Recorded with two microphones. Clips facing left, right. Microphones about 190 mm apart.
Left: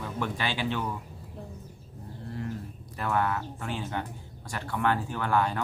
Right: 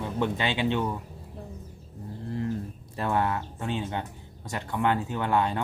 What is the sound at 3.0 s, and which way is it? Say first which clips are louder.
Speech: right 2 dB; 25° right (ahead or behind).